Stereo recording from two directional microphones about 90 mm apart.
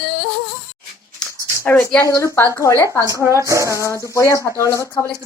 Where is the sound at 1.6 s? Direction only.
25° left (ahead or behind).